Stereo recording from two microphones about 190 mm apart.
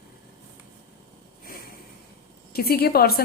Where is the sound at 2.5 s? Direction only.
55° left (ahead or behind).